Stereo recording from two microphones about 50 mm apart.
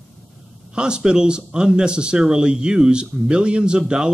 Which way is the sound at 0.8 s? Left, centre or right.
Centre.